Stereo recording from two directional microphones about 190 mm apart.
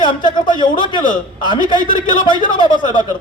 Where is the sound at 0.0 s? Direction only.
25° left (ahead or behind).